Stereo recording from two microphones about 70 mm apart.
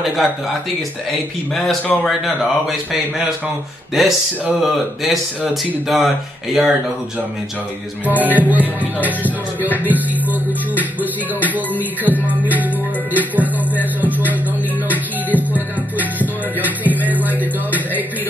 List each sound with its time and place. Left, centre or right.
0.0 s speech: centre
2.0 s speech: centre
8.0 s music: right